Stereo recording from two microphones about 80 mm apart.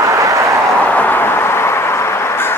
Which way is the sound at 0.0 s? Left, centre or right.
Right.